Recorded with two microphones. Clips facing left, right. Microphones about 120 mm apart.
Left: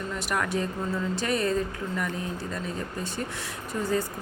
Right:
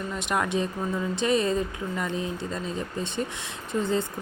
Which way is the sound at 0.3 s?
20° right (ahead or behind).